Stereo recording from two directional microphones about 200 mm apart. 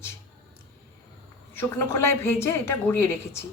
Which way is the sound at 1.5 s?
10° left (ahead or behind).